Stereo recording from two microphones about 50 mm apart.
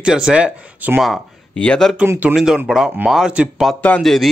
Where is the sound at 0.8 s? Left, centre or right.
Right.